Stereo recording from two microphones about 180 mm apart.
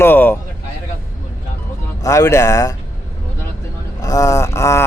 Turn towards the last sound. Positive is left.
turn(degrees=15)  # may be behind; listen again after turning